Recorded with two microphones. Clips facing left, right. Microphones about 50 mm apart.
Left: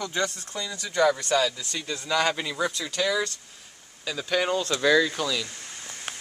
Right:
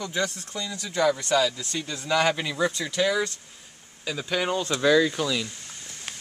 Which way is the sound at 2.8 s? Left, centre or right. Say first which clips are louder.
Right 2 dB; centre.